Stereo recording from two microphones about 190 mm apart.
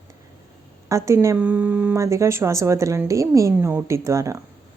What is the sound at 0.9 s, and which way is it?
Speech, 15° right (ahead or behind).